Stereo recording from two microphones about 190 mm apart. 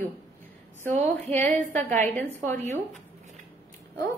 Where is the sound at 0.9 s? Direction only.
35° right (ahead or behind).